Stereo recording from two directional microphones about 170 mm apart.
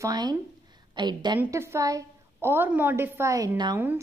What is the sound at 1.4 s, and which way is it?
A woman's voice, 15° right (ahead or behind).